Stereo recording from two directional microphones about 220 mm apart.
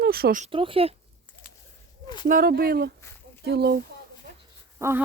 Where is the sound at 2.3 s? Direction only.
40° right (ahead or behind).